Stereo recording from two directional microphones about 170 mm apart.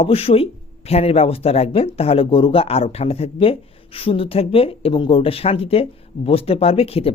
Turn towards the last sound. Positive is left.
turn(degrees=35)  # may be behind; listen again after turning